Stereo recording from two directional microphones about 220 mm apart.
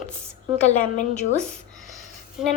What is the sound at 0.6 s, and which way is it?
Speech, 30° left (ahead or behind).